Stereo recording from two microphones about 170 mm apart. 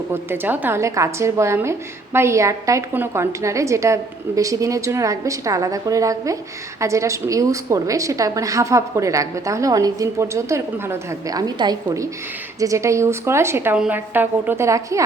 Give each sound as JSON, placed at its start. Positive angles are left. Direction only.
{"t": 0.1, "sound": "a woman's voice", "side_deg": -10}